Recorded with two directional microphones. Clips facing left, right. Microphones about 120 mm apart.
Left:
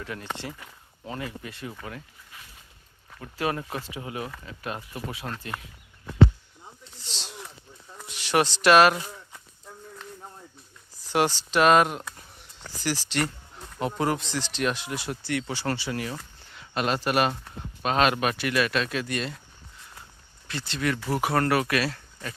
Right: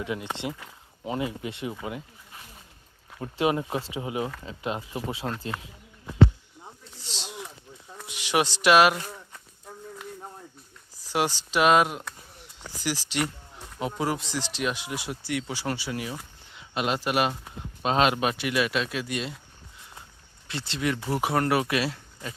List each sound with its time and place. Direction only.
0.0 s speech: 15° right (ahead or behind)
3.2 s speech: 20° right (ahead or behind)
7.2 s a sound: 10° right (ahead or behind)
8.0 s speech: 10° right (ahead or behind)
11.1 s speech: 10° right (ahead or behind)
17.8 s speech: 20° right (ahead or behind)
20.5 s speech: 25° right (ahead or behind)